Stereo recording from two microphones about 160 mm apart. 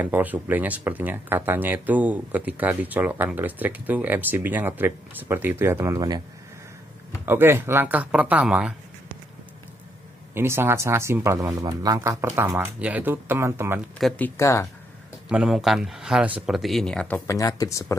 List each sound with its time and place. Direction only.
0.0 s speech: 10° right (ahead or behind)
7.2 s speech: 15° right (ahead or behind)
10.3 s speech: 15° right (ahead or behind)
13.9 s speech: 5° left (ahead or behind)
15.2 s speech: 5° right (ahead or behind)
17.3 s speech: 20° left (ahead or behind)